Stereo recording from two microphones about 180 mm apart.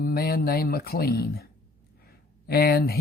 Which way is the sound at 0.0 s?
55° left (ahead or behind).